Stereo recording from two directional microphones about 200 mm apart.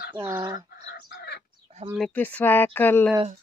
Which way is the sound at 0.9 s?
55° left (ahead or behind).